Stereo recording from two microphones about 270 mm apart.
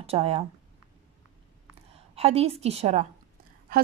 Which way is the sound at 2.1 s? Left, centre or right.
Right.